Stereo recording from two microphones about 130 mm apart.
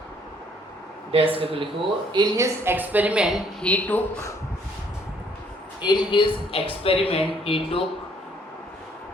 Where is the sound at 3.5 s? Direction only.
10° left (ahead or behind).